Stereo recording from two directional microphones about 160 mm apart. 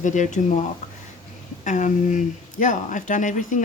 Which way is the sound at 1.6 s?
50° left (ahead or behind).